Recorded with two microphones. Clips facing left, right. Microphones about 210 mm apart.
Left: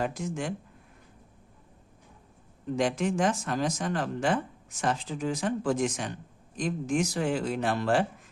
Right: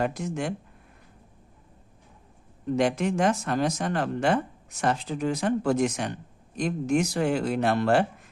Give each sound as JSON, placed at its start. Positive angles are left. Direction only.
{"t": 0.0, "sound": "speech", "side_deg": -65}
{"t": 2.7, "sound": "speech", "side_deg": -65}